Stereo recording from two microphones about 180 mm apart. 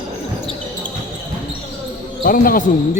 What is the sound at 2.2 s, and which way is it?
Speech, 50° left (ahead or behind).